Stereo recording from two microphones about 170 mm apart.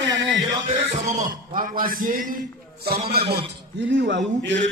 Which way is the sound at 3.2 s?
65° right (ahead or behind).